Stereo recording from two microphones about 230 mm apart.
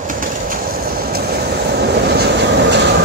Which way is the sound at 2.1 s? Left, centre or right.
Right.